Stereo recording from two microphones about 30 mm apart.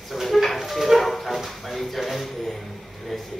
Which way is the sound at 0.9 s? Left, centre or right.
Centre.